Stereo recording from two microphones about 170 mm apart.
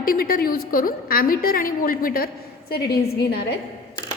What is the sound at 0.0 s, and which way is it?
A woman's voice, 60° left (ahead or behind).